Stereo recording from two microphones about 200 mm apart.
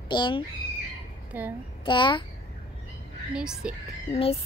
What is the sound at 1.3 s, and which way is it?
Speech, 10° right (ahead or behind).